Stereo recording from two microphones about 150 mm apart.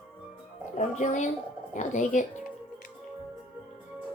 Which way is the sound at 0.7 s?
55° left (ahead or behind).